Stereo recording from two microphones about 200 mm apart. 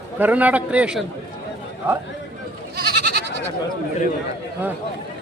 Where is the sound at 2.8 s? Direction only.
50° right (ahead or behind).